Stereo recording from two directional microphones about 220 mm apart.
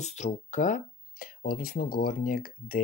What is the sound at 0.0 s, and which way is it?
Speech, 30° left (ahead or behind).